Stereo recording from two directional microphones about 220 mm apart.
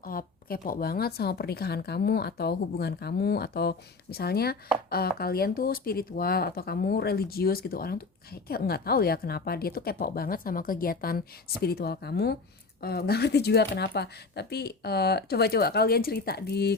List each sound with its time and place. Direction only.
0.0 s speech: 40° left (ahead or behind)